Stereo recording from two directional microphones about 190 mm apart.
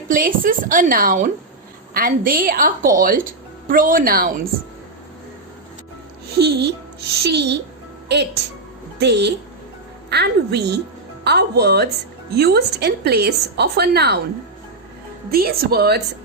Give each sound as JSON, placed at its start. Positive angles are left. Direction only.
{"t": 0.1, "sound": "speech", "side_deg": -45}
{"t": 6.4, "sound": "a woman's voice", "side_deg": -60}
{"t": 15.3, "sound": "a woman's voice", "side_deg": -55}